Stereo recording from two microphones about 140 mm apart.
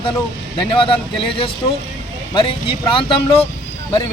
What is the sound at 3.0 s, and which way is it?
Speech, 40° left (ahead or behind).